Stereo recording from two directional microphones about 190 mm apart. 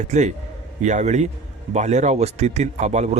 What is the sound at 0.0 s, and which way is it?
Speech, 40° right (ahead or behind).